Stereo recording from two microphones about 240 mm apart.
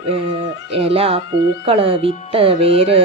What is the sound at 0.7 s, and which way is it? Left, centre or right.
Speech, right.